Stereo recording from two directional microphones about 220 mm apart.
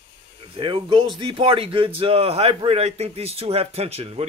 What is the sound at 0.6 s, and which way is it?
A man's voice, 25° right (ahead or behind).